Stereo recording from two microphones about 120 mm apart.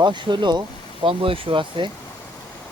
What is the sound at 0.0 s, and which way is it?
Speech, 40° right (ahead or behind).